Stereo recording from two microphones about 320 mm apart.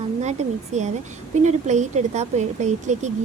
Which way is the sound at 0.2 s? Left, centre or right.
Right.